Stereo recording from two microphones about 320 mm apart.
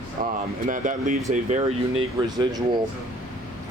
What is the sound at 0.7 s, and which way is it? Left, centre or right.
Speech, right.